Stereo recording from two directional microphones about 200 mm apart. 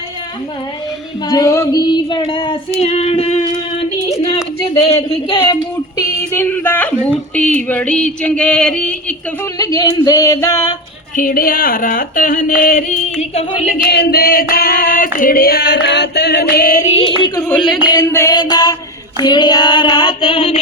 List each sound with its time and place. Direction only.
1.3 s female singing: 15° left (ahead or behind); by 3.8 s 30° left (ahead or behind)
4.9 s female singing: 25° left (ahead or behind)
6.0 s speech: 10° left (ahead or behind)
9.6 s speech: 20° left (ahead or behind)
11.2 s female singing: 45° left (ahead or behind)
13.7 s female singing: 55° left (ahead or behind); by 20.6 s 25° left (ahead or behind)